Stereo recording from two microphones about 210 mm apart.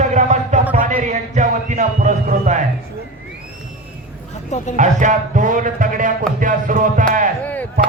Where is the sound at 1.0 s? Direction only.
35° right (ahead or behind).